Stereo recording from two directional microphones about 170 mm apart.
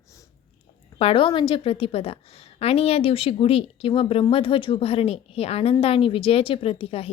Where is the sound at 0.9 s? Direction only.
35° left (ahead or behind).